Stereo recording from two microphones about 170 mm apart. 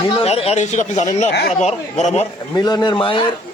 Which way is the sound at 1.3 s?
75° left (ahead or behind).